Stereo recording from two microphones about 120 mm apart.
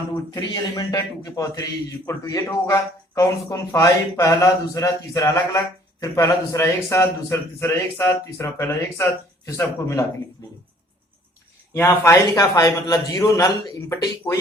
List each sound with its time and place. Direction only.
0.3 s a man's voice: 35° left (ahead or behind)
11.7 s speech: 20° left (ahead or behind)